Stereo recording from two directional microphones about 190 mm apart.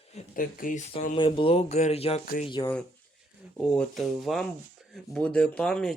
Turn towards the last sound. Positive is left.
turn(degrees=5)  # may be behind; listen again after turning